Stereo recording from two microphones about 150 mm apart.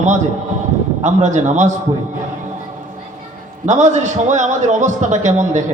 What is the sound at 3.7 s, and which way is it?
A man's voice, 50° right (ahead or behind).